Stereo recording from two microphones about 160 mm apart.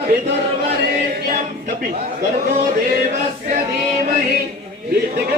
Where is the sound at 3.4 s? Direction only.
60° right (ahead or behind).